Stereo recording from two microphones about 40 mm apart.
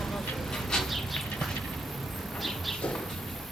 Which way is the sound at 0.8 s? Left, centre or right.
Centre.